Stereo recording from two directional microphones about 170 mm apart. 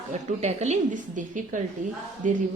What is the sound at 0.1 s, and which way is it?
Speech, 40° right (ahead or behind).